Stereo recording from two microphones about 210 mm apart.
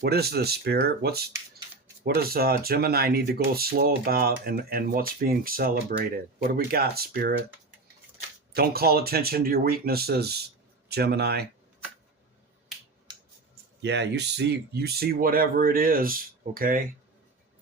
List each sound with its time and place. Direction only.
0.0 s speech: 50° right (ahead or behind)
8.5 s speech: 50° right (ahead or behind)
13.8 s speech: 55° right (ahead or behind)